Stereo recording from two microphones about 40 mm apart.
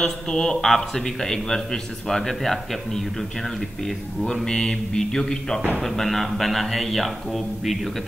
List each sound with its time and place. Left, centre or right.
0.0 s a man's voice: centre
4.5 s a man's voice: centre